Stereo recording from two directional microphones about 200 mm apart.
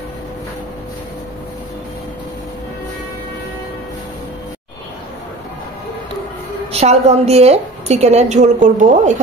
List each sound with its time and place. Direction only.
6.7 s a woman's voice: 30° right (ahead or behind)